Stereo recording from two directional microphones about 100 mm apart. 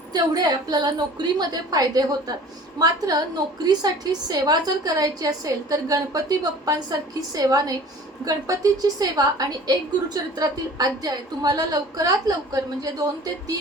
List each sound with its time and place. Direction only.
0.1 s a woman's voice: 40° right (ahead or behind)